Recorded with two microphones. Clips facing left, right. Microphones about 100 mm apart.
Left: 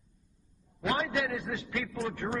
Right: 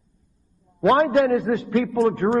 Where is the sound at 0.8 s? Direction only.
50° right (ahead or behind).